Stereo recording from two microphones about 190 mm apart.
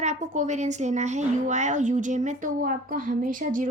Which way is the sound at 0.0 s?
40° right (ahead or behind).